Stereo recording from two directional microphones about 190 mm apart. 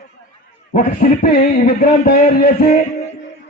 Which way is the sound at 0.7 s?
45° left (ahead or behind).